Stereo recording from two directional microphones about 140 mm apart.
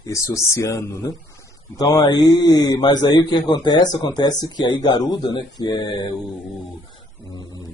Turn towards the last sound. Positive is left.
turn(degrees=30)  # may be behind; listen again after turning